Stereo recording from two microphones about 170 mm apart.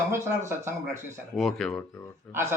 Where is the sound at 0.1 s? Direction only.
15° right (ahead or behind).